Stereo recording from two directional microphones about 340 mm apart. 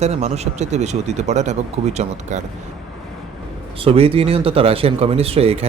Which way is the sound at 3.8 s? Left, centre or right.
Centre.